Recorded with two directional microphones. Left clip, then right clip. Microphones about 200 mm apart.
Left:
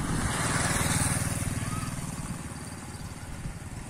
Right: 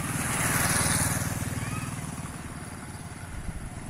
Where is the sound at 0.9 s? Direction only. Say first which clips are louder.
Right 1 dB; 40° left (ahead or behind).